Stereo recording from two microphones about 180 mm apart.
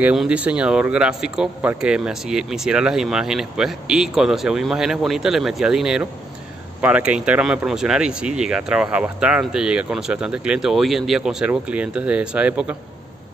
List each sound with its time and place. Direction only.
0.0 s speech: 5° right (ahead or behind)